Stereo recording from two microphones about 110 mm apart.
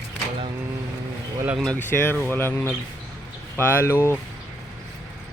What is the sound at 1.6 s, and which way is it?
Speech, 15° left (ahead or behind).